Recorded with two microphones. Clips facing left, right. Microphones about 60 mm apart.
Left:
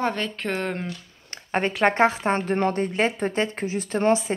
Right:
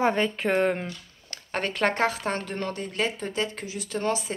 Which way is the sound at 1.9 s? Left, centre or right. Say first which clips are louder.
Left 6 dB; left.